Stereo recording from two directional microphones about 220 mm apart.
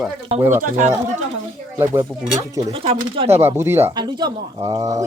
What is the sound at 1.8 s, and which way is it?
Speech, 10° right (ahead or behind).